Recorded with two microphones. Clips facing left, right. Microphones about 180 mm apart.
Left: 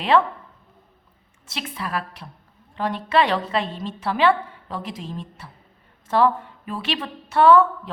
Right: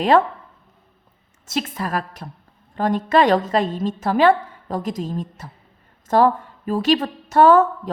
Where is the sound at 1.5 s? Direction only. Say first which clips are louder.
Right 6 dB; 45° right (ahead or behind).